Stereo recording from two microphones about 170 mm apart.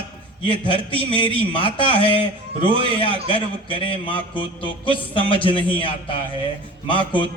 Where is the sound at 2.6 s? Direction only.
30° right (ahead or behind).